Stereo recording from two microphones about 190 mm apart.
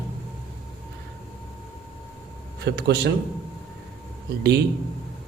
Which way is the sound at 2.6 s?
60° right (ahead or behind).